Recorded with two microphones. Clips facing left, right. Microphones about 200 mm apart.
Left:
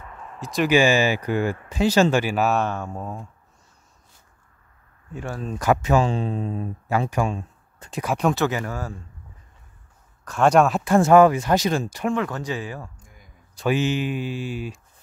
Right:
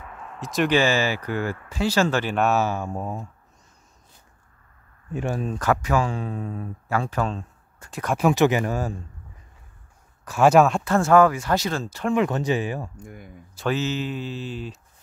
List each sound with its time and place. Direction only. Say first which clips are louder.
0.2 s a sound: even; centre (ahead or behind)
0.7 s speech: left 5 dB; 15° left (ahead or behind); by 3.3 s 15° right (ahead or behind)
5.1 s speech: right 5 dB; 20° right (ahead or behind)
5.6 s speech: left 4 dB; 20° left (ahead or behind)
8.2 s speech: right 4 dB; 10° right (ahead or behind)
10.2 s speech: right 1 dB; 5° right (ahead or behind)
10.8 s speech: left 3 dB; 15° left (ahead or behind)
12.1 s speech: right 5 dB; 20° right (ahead or behind)
12.9 s speech: right 13 dB; 60° right (ahead or behind)
13.7 s speech: left 3 dB; 15° left (ahead or behind)